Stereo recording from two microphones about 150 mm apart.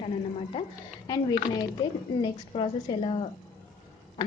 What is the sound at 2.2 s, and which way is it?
Speech, 35° left (ahead or behind).